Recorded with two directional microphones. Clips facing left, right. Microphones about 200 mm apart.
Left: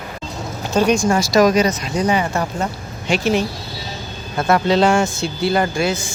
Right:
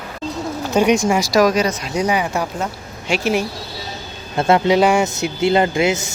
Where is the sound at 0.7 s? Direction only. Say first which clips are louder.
Even; 15° right (ahead or behind).